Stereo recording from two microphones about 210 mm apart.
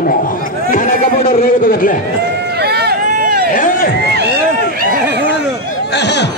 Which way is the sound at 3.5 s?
40° left (ahead or behind).